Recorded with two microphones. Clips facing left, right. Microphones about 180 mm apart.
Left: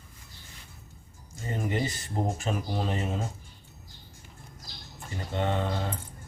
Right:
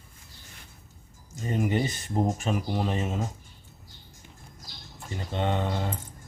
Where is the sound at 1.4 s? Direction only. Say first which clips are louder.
Right 4 dB; 20° right (ahead or behind).